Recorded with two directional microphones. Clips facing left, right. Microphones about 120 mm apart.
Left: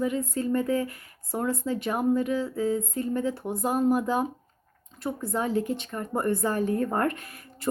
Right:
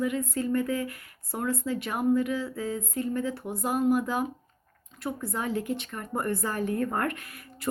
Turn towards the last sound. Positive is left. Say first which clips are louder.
# left 3 dB
turn(degrees=25)  # may be behind; listen again after turning